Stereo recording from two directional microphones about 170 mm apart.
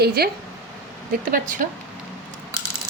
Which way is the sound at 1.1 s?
55° right (ahead or behind).